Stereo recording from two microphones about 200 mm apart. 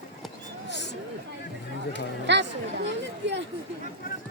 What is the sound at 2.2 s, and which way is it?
Speech, 60° right (ahead or behind).